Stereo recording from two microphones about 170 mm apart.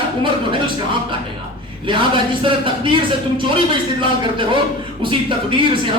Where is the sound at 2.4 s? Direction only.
30° right (ahead or behind).